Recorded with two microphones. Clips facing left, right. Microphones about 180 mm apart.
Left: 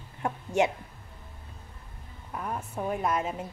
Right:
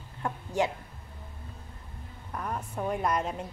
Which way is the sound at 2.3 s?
5° left (ahead or behind).